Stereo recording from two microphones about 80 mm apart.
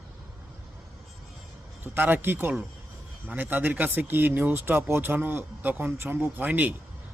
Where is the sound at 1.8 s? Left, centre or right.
Right.